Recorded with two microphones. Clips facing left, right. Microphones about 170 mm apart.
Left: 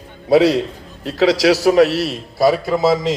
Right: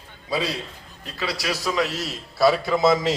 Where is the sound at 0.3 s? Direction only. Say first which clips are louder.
Left 14 dB; 75° left (ahead or behind).